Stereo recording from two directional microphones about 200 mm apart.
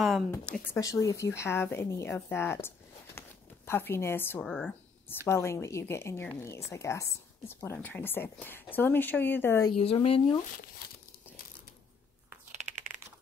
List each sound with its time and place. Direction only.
0.3 s a woman's voice: 15° left (ahead or behind)
3.2 s a sound: 10° left (ahead or behind)
4.5 s speech: centre (ahead or behind)
5.0 s a woman's voice: 10° left (ahead or behind)
9.7 s a woman's voice: 25° left (ahead or behind)